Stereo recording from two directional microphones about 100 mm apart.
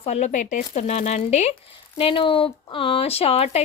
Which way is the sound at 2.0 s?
60° left (ahead or behind).